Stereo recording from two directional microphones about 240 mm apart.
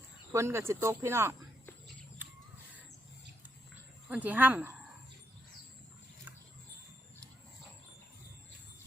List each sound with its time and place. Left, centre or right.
0.3 s speech: centre
4.1 s speech: centre